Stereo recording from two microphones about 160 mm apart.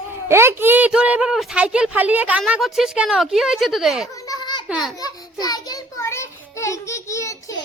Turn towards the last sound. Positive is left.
turn(degrees=20)  # may be behind; listen again after turning